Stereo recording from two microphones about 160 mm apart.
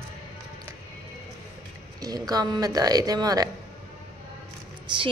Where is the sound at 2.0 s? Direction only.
25° right (ahead or behind).